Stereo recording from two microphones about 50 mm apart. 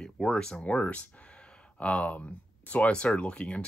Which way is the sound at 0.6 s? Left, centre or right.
Left.